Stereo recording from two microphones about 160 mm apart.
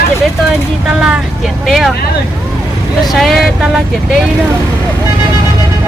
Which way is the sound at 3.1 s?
Centre (ahead or behind).